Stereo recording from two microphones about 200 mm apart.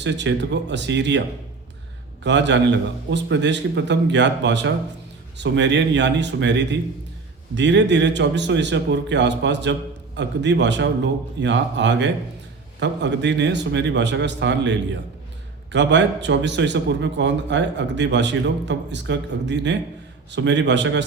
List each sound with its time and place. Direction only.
0.0 s a man's voice: 60° right (ahead or behind)
2.2 s a man's voice: 60° right (ahead or behind)